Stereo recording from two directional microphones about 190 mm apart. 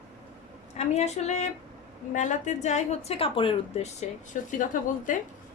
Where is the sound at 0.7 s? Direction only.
35° left (ahead or behind).